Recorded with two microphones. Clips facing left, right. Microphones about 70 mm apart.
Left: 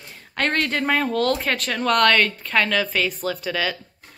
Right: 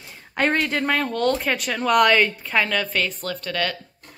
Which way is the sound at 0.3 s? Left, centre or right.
Centre.